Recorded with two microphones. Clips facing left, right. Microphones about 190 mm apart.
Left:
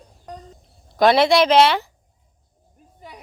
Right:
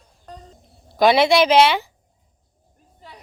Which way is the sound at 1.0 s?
Centre (ahead or behind).